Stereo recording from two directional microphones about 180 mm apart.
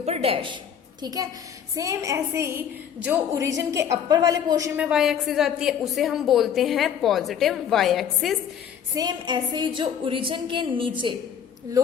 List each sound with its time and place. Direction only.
0.0 s a woman's voice: 35° right (ahead or behind)
1.0 s a woman's voice: 20° right (ahead or behind)
4.8 s a woman's voice: 5° right (ahead or behind)
9.0 s a woman's voice: 25° right (ahead or behind)